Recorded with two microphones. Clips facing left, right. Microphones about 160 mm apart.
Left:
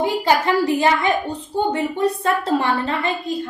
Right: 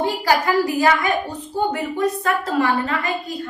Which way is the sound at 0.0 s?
25° left (ahead or behind).